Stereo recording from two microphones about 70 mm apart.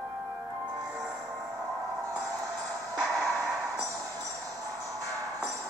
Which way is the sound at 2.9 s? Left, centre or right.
Right.